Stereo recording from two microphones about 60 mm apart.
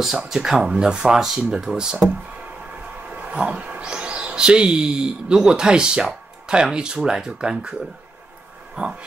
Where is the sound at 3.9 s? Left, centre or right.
Centre.